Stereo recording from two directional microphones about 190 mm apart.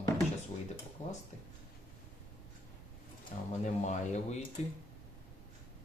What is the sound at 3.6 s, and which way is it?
Speech, 35° left (ahead or behind).